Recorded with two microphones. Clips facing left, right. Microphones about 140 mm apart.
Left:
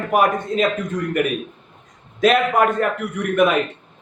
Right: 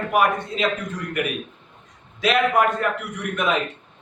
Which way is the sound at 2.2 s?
45° left (ahead or behind).